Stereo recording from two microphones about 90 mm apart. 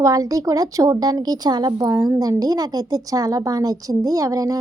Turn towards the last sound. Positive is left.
turn(degrees=-40)  # may be behind; listen again after turning